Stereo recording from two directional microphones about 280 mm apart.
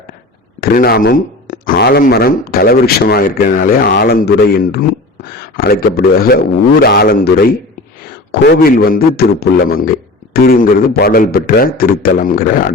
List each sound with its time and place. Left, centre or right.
0.6 s a man's voice: left